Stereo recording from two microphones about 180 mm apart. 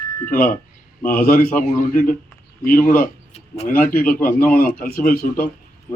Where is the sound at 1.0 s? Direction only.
50° left (ahead or behind).